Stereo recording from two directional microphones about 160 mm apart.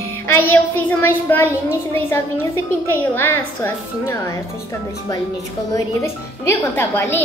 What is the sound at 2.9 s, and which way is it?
A woman's voice, 15° left (ahead or behind).